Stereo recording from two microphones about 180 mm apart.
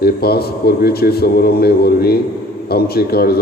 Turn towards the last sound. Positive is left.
turn(degrees=60)  # may be behind; listen again after turning